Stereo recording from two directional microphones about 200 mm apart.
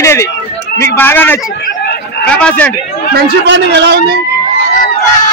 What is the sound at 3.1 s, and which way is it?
A man's voice, 60° right (ahead or behind).